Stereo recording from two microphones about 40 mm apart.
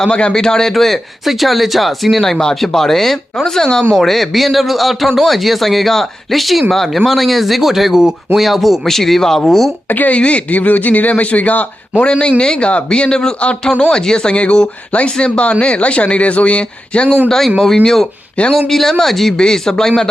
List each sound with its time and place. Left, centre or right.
0.1 s speech: left; by 2.2 s centre
2.2 s speech: centre
9.9 s speech: left
10.2 s a man's voice: left
12.4 s a man's voice: left
17.2 s speech: centre
18.4 s a man's voice: left
18.7 s speech: centre